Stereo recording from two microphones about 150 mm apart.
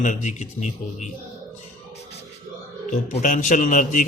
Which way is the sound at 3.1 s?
60° left (ahead or behind).